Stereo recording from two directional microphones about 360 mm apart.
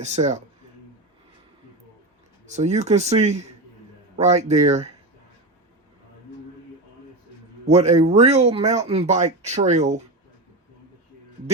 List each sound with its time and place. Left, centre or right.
0.0 s speech: centre
2.5 s speech: centre
7.7 s speech: centre